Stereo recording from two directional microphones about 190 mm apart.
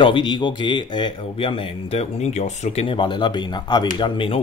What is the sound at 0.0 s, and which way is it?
Speech, 25° left (ahead or behind).